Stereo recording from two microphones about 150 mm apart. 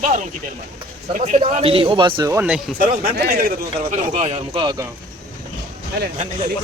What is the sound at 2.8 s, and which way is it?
Speech, 80° right.